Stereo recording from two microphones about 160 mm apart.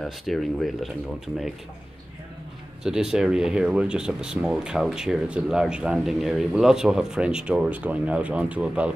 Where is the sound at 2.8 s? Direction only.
5° right (ahead or behind).